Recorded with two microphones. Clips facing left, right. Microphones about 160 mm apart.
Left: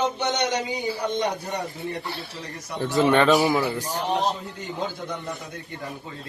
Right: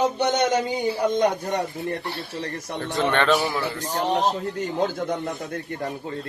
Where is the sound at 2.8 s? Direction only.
5° left (ahead or behind).